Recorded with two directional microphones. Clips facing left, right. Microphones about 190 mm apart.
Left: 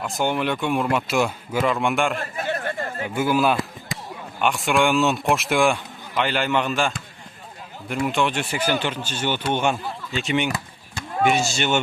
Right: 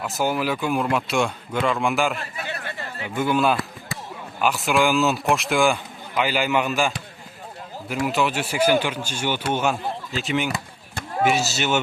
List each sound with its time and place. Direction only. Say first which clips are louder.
0.0 s a man's voice: even; 5° right (ahead or behind)
2.1 s chatter: left 5 dB; 45° left (ahead or behind)
3.2 s a man's voice: even; 5° left (ahead or behind)